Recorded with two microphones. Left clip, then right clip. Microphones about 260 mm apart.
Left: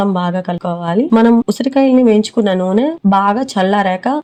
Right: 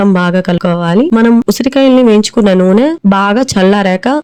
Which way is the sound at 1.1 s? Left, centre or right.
Right.